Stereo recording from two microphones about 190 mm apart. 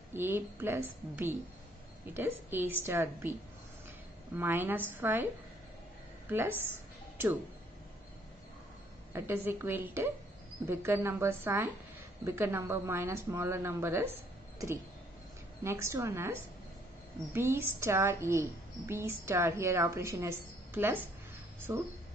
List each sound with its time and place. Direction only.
0.1 s a woman's voice: 10° right (ahead or behind)
4.4 s a woman's voice: 10° right (ahead or behind)
9.1 s a woman's voice: 10° right (ahead or behind)
15.6 s a woman's voice: 15° right (ahead or behind)